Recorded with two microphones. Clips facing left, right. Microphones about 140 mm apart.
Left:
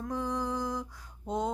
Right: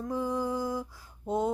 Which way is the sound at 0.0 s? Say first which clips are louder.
Right 2 dB; 5° right (ahead or behind).